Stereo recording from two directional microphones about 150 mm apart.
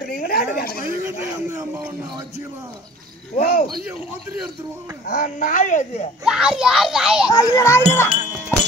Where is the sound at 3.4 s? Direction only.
85° left.